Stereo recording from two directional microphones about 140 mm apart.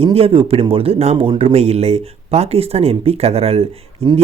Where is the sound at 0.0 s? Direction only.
45° right (ahead or behind).